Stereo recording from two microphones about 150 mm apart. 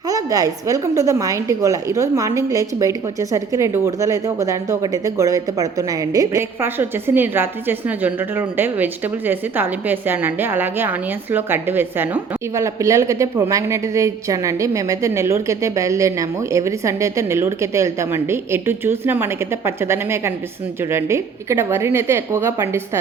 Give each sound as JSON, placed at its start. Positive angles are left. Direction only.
{"t": 0.1, "sound": "a woman's voice", "side_deg": -25}